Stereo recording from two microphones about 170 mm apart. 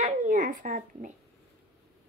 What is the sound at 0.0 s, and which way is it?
Dog, 50° right (ahead or behind).